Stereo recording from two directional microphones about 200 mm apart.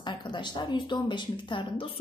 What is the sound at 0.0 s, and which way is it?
A woman's voice, 25° left (ahead or behind).